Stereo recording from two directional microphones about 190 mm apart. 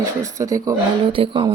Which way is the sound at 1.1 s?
30° right (ahead or behind).